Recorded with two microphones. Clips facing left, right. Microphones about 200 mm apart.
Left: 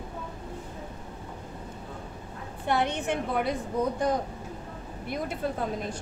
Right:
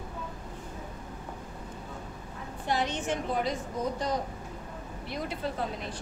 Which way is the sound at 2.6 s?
60° left (ahead or behind).